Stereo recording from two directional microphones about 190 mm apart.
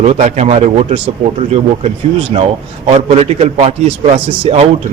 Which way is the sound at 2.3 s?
30° right (ahead or behind).